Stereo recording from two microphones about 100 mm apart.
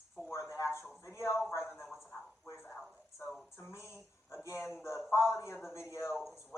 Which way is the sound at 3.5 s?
30° left (ahead or behind).